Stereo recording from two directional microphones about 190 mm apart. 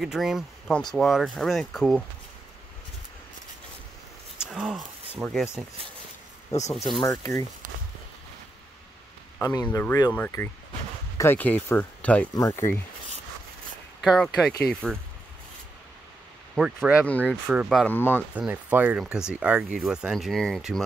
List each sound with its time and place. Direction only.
0.0 s speech: 5° right (ahead or behind)
4.5 s speech: centre (ahead or behind)
6.7 s speech: centre (ahead or behind)
7.0 s speech: 15° left (ahead or behind)
9.4 s speech: 15° left (ahead or behind)
14.0 s speech: centre (ahead or behind)
16.5 s speech: 5° right (ahead or behind)
17.0 s speech: 5° left (ahead or behind)
17.8 s speech: 10° left (ahead or behind)
18.3 s speech: 10° right (ahead or behind)